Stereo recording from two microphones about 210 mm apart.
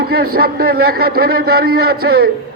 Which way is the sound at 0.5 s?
45° right (ahead or behind).